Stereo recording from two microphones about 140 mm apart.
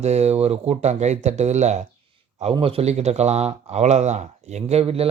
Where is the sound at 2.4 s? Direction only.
45° right (ahead or behind).